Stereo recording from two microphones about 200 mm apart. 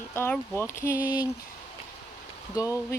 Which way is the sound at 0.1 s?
10° left (ahead or behind).